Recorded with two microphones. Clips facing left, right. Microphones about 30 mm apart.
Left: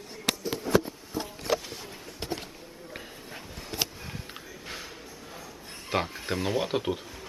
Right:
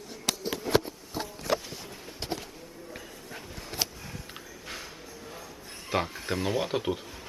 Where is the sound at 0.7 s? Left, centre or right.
Right.